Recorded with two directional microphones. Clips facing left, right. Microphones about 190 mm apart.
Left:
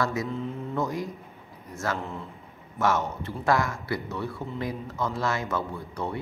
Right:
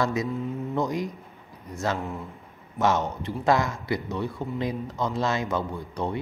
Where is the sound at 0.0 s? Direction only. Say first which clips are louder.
Right 2 dB; 20° right (ahead or behind).